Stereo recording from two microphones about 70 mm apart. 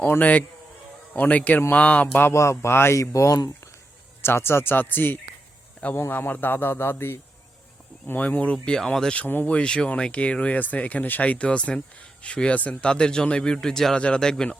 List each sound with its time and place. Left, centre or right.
0.2 s speech: left
2.3 s speech: left
3.0 s speech: left
4.2 s speech: left
8.5 s speech: centre
9.2 s speech: left